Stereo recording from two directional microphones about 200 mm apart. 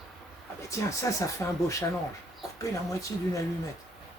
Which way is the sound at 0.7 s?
15° left (ahead or behind).